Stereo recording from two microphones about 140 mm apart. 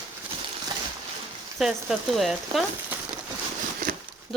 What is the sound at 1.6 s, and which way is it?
Speech, centre (ahead or behind).